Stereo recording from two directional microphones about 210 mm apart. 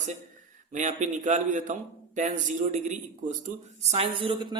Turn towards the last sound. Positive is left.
turn(degrees=-25)  # may be behind; listen again after turning